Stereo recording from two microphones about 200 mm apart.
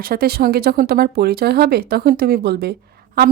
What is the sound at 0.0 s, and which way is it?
Speech, 50° right (ahead or behind).